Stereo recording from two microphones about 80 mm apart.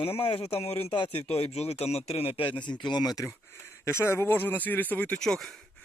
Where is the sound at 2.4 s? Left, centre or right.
Left.